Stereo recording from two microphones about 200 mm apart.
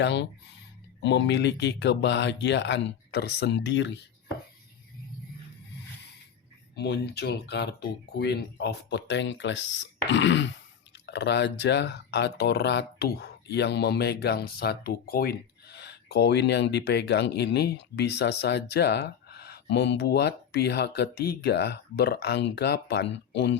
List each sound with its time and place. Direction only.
0.0 s speech: 60° left (ahead or behind)
6.7 s speech: 55° left (ahead or behind)